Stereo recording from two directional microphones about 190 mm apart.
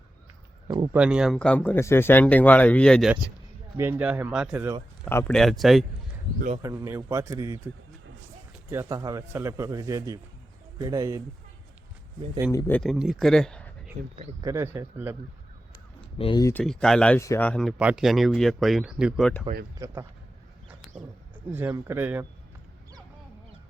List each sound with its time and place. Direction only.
0.9 s speech: 5° right (ahead or behind)
3.8 s a man's voice: 10° right (ahead or behind)
5.0 s speech: 10° left (ahead or behind)
6.6 s a man's voice: 15° right (ahead or behind)
8.7 s a man's voice: 15° right (ahead or behind)
12.5 s speech: 15° left (ahead or behind)
12.8 s speech: centre (ahead or behind)
14.0 s speech: 40° right (ahead or behind)
14.4 s a man's voice: 15° right (ahead or behind)
16.1 s speech: 30° left (ahead or behind)
16.4 s speech: 15° left (ahead or behind); by 19.3 s 5° right (ahead or behind)
19.8 s a man's voice: 15° right (ahead or behind)